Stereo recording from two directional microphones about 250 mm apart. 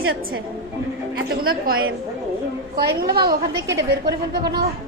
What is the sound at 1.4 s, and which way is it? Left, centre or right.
A woman's voice, right.